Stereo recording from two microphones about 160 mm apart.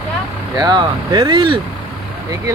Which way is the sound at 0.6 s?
25° right (ahead or behind).